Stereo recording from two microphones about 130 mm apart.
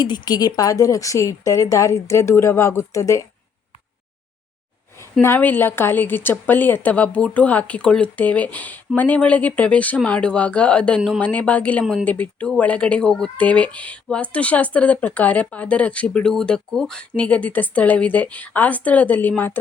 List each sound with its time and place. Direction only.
0.0 s speech: 35° left (ahead or behind)
5.2 s speech: 15° left (ahead or behind)